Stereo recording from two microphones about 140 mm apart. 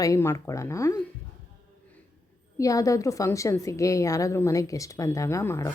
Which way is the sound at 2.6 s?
25° left (ahead or behind).